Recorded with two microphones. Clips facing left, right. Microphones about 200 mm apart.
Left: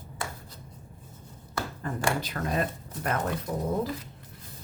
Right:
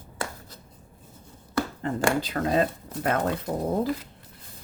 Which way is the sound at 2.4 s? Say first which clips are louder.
Right 6 dB; 45° right (ahead or behind).